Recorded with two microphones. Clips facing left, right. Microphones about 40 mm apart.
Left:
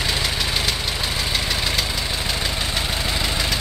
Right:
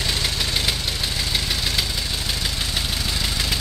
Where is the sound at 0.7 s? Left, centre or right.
Centre.